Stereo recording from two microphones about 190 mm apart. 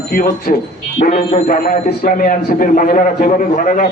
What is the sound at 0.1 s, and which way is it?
A man's voice, 50° left (ahead or behind).